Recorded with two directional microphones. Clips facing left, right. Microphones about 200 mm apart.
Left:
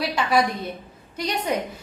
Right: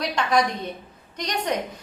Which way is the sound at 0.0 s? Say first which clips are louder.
Left 1 dB; 5° left (ahead or behind).